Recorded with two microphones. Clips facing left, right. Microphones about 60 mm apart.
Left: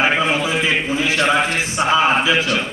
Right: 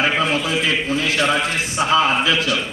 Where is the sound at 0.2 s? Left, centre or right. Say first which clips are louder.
Left 1 dB; centre.